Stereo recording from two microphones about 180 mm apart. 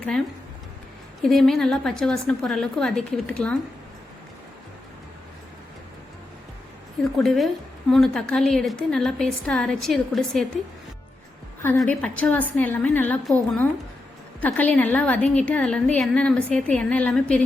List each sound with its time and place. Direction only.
1.2 s a woman's voice: centre (ahead or behind)
7.2 s a woman's voice: centre (ahead or behind)
11.9 s a woman's voice: 10° left (ahead or behind)